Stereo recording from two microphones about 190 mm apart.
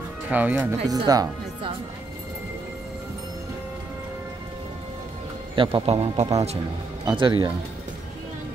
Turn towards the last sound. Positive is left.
turn(degrees=-25)  # may be behind; listen again after turning